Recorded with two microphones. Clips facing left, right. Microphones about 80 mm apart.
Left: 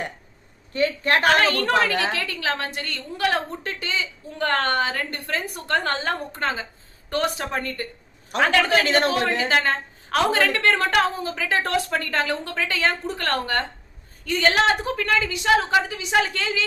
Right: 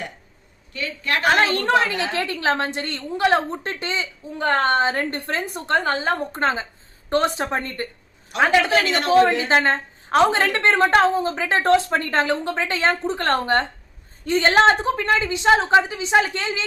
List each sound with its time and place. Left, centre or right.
0.7 s a woman's voice: left
1.5 s a woman's voice: right
6.3 s a woman's voice: right
8.8 s a woman's voice: left
9.0 s a woman's voice: right